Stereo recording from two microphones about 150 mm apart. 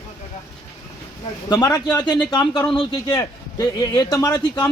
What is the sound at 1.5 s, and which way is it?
A man's voice, 25° left (ahead or behind).